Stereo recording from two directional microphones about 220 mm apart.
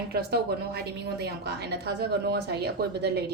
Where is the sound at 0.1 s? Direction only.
45° right (ahead or behind).